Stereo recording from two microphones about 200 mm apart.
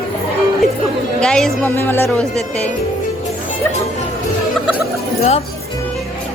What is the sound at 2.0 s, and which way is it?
Speech, 5° left (ahead or behind).